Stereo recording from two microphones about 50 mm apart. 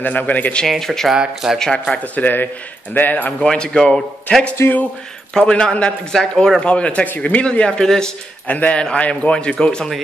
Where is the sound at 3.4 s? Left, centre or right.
Centre.